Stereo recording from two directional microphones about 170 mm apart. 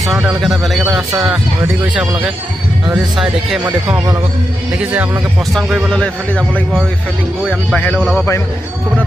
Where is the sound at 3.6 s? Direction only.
15° right (ahead or behind).